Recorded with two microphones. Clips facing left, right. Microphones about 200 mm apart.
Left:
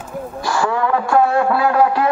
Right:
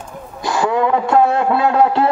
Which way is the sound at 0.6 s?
20° right (ahead or behind).